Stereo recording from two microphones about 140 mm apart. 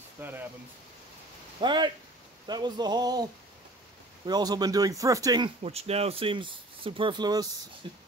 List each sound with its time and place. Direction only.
0.2 s speech: 15° right (ahead or behind)
1.6 s speech: 35° right (ahead or behind)
4.3 s speech: 30° right (ahead or behind)
5.6 s speech: 45° right (ahead or behind)